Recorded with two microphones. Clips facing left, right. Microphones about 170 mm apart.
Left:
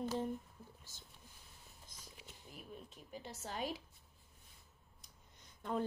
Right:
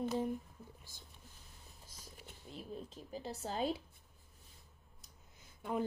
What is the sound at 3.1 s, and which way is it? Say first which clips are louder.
Speech: right 5 dB; 35° right (ahead or behind).